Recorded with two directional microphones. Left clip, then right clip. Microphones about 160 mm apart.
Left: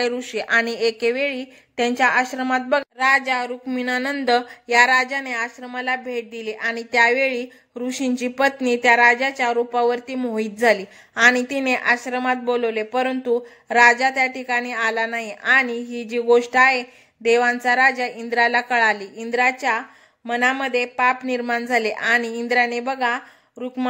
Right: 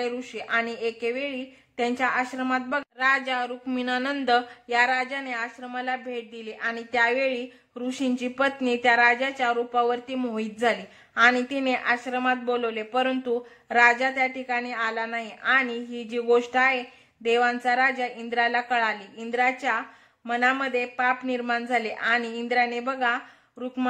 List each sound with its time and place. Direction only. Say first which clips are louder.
0.0 s speech: left 7 dB; 40° left (ahead or behind)